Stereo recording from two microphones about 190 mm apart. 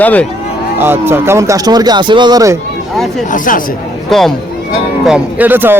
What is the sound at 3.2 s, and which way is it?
Speech, 45° left (ahead or behind).